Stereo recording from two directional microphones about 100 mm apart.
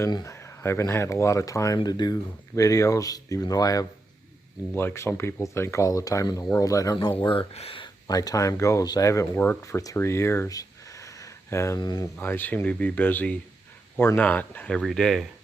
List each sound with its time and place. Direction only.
0.1 s speech: 35° left (ahead or behind)
4.7 s speech: 20° left (ahead or behind); by 7.1 s 40° left (ahead or behind)
7.3 s speech: 75° left (ahead or behind)
8.0 s speech: 40° left (ahead or behind)
11.8 s speech: 45° left (ahead or behind)
12.1 s speech: 20° left (ahead or behind)
14.8 s speech: 5° left (ahead or behind)